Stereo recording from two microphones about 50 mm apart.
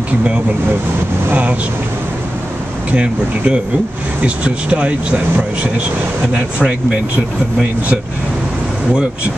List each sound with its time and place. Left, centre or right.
1.3 s speech: right
2.9 s speech: right